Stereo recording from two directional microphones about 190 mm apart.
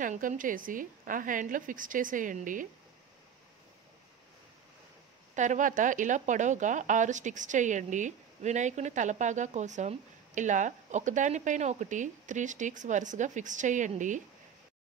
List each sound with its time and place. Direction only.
0.0 s a woman's voice: 40° right (ahead or behind)
5.3 s speech: 40° right (ahead or behind)